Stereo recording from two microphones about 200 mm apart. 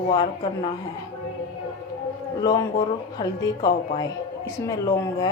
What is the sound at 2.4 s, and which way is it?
A woman's voice, 20° left (ahead or behind).